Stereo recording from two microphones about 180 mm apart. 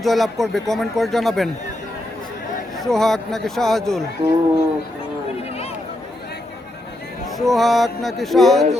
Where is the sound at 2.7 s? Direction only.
Centre (ahead or behind).